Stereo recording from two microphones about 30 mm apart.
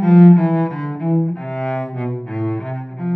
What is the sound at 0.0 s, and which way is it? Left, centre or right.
Cello, centre.